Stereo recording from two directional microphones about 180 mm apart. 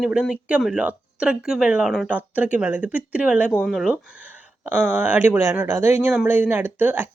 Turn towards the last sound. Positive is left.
turn(degrees=-10)  # may be behind; listen again after turning